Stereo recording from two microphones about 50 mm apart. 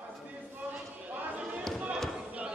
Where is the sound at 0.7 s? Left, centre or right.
Right.